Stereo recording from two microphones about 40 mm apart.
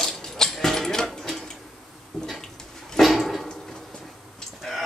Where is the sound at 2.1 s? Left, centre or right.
Centre.